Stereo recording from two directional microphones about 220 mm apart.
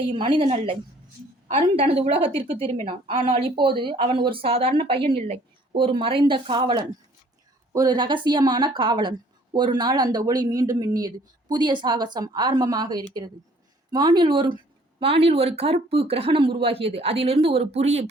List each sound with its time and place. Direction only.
0.1 s speech: 25° right (ahead or behind)
3.3 s speech: 25° right (ahead or behind)